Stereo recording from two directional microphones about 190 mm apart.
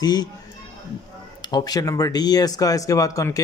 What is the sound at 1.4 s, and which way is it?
Speech, 20° left (ahead or behind).